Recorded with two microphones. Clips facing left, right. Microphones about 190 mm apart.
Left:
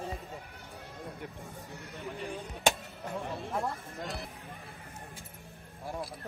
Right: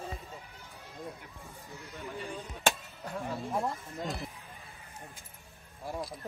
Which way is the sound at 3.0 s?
Centre (ahead or behind).